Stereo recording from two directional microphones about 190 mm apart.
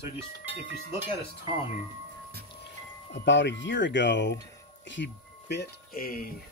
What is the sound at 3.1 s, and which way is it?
Wind chime, 70° left (ahead or behind).